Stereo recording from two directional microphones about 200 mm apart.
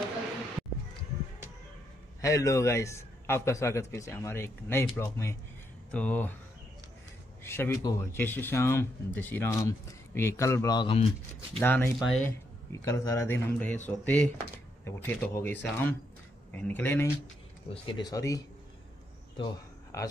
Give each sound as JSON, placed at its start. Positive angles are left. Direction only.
{"t": 2.2, "sound": "speech", "side_deg": 15}
{"t": 7.4, "sound": "speech", "side_deg": 10}
{"t": 11.6, "sound": "speech", "side_deg": 10}
{"t": 12.7, "sound": "speech", "side_deg": 15}
{"t": 17.6, "sound": "speech", "side_deg": 25}
{"t": 19.3, "sound": "a sound", "side_deg": 20}